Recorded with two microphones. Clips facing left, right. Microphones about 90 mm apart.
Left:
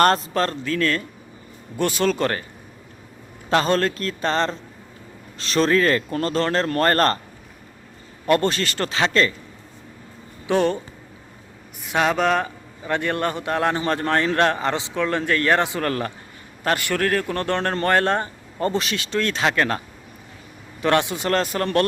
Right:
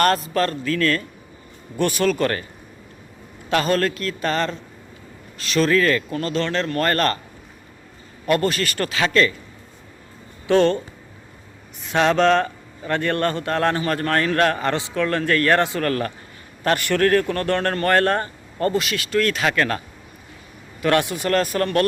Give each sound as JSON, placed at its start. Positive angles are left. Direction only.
{"t": 0.0, "sound": "a man's voice", "side_deg": 30}
{"t": 3.5, "sound": "a man's voice", "side_deg": 30}
{"t": 8.3, "sound": "a man's voice", "side_deg": 30}
{"t": 10.4, "sound": "speech", "side_deg": 15}
{"t": 11.9, "sound": "a man's voice", "side_deg": 10}
{"t": 20.8, "sound": "a man's voice", "side_deg": 20}